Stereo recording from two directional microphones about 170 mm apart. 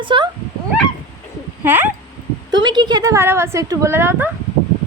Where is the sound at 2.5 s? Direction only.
25° right (ahead or behind).